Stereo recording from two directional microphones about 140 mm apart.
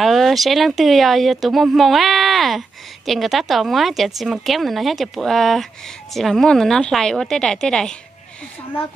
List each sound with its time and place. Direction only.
0.0 s a woman's voice: centre (ahead or behind)